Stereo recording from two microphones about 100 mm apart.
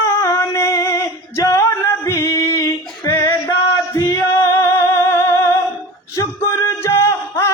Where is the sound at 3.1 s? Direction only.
25° left (ahead or behind).